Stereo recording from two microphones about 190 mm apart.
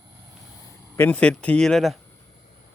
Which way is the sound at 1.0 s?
5° left (ahead or behind).